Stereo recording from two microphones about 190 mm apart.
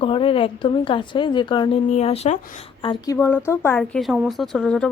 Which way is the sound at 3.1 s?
10° left (ahead or behind).